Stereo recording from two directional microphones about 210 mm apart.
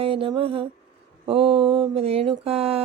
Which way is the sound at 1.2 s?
25° right (ahead or behind).